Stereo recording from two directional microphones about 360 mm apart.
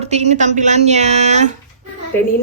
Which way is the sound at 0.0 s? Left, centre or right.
Centre.